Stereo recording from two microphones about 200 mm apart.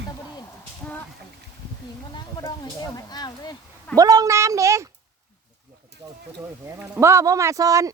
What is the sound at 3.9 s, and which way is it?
Speech, 20° right (ahead or behind).